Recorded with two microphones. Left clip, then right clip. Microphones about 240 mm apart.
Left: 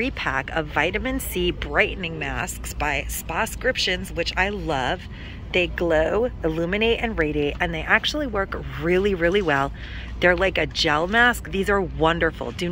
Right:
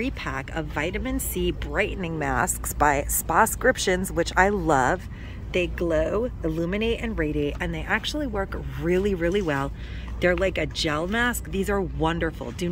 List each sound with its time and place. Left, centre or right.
0.0 s speech: centre
5.5 s speech: centre